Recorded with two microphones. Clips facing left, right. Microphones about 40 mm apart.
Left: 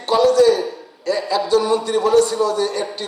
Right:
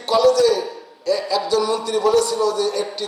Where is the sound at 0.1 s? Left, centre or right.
Left.